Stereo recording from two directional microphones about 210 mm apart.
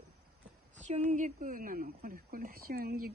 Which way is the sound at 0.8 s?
35° right (ahead or behind).